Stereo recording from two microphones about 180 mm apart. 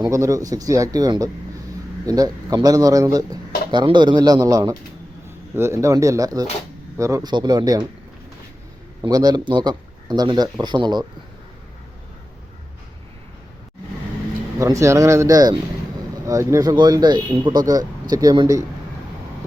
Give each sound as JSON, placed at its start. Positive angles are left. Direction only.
{"t": 0.0, "sound": "speech", "side_deg": -15}
{"t": 9.0, "sound": "speech", "side_deg": -20}
{"t": 14.6, "sound": "speech", "side_deg": -15}